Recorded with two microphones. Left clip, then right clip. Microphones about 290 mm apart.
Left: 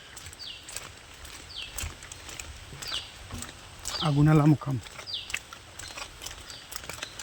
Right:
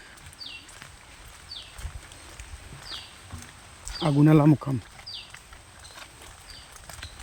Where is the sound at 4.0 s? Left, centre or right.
Centre.